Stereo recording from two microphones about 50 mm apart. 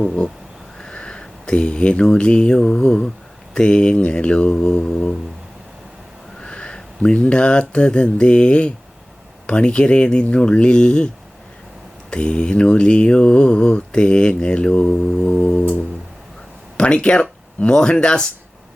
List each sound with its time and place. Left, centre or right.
0.8 s speech: centre
3.5 s mantra: centre
6.4 s speech: centre
9.5 s mantra: centre
12.1 s mantra: left
16.7 s mantra: left